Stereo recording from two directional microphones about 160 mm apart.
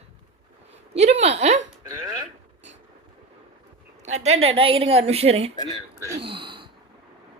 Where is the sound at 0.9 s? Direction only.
45° right (ahead or behind).